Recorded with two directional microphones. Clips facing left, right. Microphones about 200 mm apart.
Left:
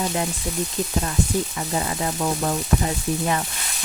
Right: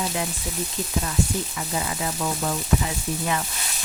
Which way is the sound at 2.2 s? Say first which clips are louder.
Left 4 dB; 40° left (ahead or behind).